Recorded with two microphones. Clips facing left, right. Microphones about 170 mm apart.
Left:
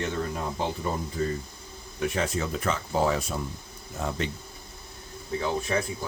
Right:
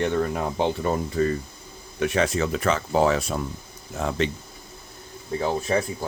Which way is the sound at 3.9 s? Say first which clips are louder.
Right 5 dB; 90° right.